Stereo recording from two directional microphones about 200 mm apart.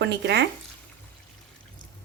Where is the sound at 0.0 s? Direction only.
60° right (ahead or behind).